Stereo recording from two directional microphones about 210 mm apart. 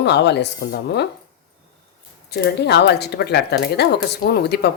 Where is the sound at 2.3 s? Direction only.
50° left (ahead or behind).